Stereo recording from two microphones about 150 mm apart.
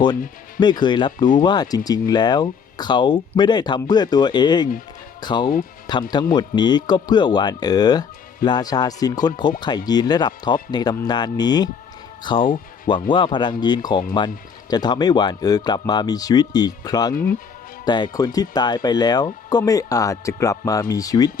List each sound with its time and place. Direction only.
0.6 s speech: 30° left (ahead or behind)
12.4 s speech: 65° left (ahead or behind)
12.9 s speech: 30° left (ahead or behind)